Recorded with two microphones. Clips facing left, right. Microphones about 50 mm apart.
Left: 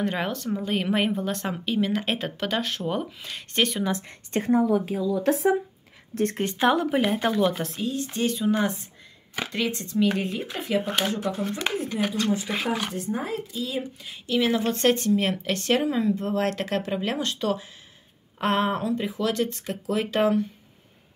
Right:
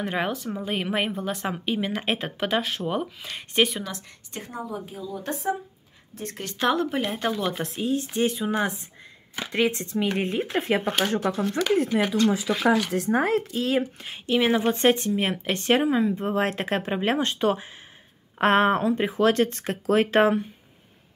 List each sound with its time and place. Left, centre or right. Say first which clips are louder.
0.0 s speech: even; centre
4.3 s speech: left 13 dB; left
4.6 s speech: left 10 dB; left
6.4 s speech: even; centre
7.8 s speech: right 3 dB; right
10.8 s speech: right 1 dB; centre
11.1 s speech: right 2 dB; right
11.4 s speech: right 3 dB; left
12.0 s speech: right 3 dB; right
12.5 s speech: right 5 dB; centre
12.9 s speech: right 7 dB; right
14.3 s speech: right 2 dB; right